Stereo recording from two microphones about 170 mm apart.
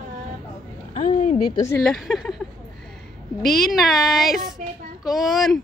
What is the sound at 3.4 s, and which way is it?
Speech, centre (ahead or behind).